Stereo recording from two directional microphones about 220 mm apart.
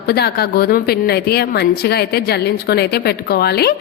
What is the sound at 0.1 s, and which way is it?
A woman's voice, 45° left (ahead or behind).